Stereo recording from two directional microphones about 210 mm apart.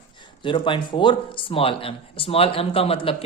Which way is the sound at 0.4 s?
25° left (ahead or behind).